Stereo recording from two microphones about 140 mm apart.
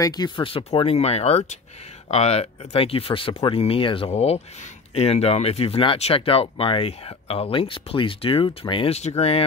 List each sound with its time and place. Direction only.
0.0 s speech: 30° left (ahead or behind); by 9.4 s 50° left (ahead or behind)